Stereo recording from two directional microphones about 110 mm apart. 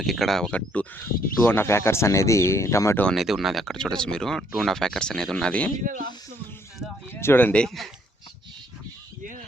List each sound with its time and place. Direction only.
0.0 s speech: centre (ahead or behind); by 3.0 s 25° left (ahead or behind)
3.2 s speech: centre (ahead or behind)
7.1 s speech: 20° left (ahead or behind); by 7.9 s 5° left (ahead or behind)